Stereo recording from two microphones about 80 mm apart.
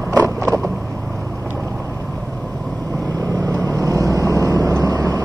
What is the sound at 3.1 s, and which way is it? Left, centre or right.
Vehicle, right.